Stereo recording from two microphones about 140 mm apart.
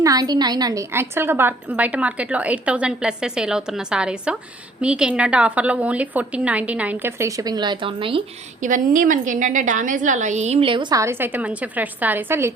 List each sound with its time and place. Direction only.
0.0 s a woman's voice: 25° right (ahead or behind)
8.6 s a woman's voice: 70° right (ahead or behind); by 11.0 s 35° right (ahead or behind)
11.0 s a woman's voice: 15° right (ahead or behind)